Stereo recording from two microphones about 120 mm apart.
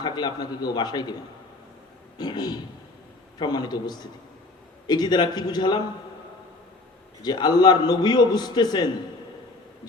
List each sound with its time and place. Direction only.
0.0 s a man's voice: 35° left (ahead or behind)
2.1 s a man's voice: 35° left (ahead or behind)
7.2 s a man's voice: 35° left (ahead or behind)